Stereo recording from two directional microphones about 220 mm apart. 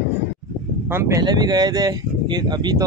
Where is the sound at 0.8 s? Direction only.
10° right (ahead or behind).